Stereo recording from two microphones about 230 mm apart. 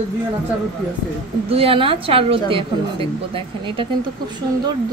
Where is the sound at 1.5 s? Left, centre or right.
Right.